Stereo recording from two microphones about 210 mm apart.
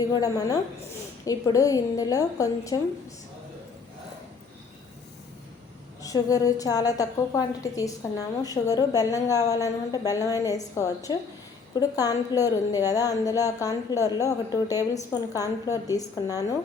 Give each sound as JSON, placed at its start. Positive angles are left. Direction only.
{"t": 0.1, "sound": "a woman's voice", "side_deg": 15}
{"t": 6.0, "sound": "a woman's voice", "side_deg": 15}